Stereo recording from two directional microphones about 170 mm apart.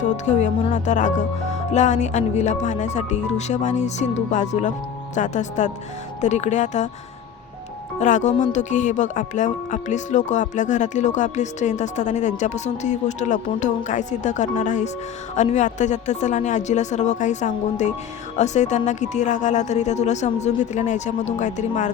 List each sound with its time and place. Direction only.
0.3 s speech: 45° left (ahead or behind)
7.9 s speech: 45° left (ahead or behind)